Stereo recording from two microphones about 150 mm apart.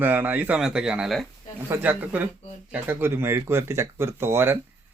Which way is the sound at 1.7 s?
10° right (ahead or behind).